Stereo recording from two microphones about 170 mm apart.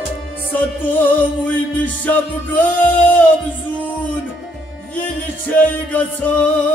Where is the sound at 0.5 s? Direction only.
10° left (ahead or behind).